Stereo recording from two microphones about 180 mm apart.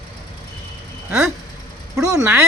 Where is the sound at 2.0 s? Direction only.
15° right (ahead or behind).